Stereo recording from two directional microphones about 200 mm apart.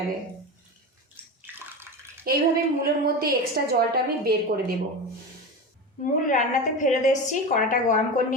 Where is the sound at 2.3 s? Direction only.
50° right (ahead or behind).